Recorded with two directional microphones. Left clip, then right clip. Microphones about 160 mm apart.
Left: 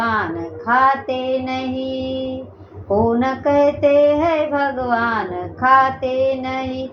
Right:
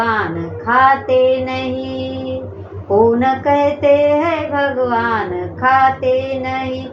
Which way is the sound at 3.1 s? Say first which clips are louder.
Right 2 dB; 25° left (ahead or behind).